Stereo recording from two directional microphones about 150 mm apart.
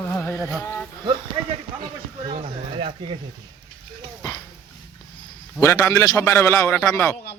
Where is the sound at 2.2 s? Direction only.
40° right (ahead or behind).